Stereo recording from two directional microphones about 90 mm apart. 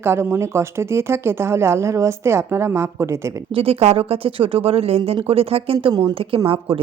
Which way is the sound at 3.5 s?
90° right.